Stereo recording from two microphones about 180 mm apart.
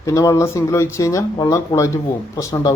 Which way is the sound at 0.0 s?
15° left (ahead or behind).